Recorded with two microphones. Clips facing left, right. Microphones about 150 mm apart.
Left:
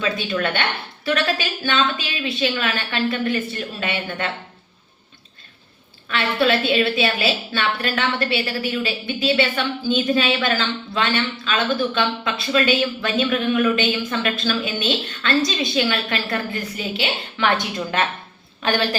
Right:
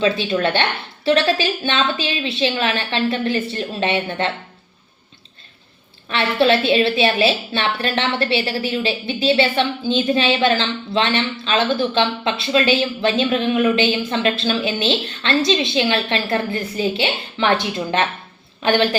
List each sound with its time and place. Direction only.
0.0 s a woman's voice: 25° right (ahead or behind)
6.1 s a woman's voice: 25° right (ahead or behind)